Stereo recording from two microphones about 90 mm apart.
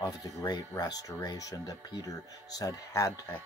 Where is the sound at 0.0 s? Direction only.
45° left (ahead or behind).